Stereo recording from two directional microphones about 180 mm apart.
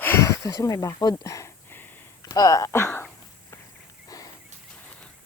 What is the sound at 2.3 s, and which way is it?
Speech, 20° left (ahead or behind).